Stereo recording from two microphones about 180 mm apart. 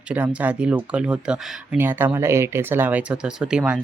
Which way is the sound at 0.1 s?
10° right (ahead or behind).